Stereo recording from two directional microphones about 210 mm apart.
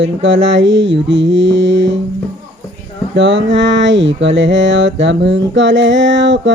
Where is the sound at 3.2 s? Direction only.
60° right (ahead or behind).